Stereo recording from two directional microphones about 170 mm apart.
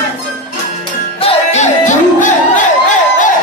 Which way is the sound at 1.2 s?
45° left (ahead or behind).